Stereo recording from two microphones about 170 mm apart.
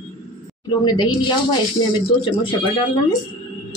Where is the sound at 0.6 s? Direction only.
25° left (ahead or behind).